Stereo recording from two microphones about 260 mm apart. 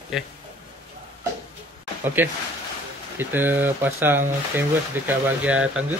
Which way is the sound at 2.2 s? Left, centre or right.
Centre.